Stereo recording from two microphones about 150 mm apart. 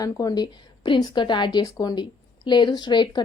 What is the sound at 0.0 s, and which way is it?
A woman's voice, 25° left (ahead or behind).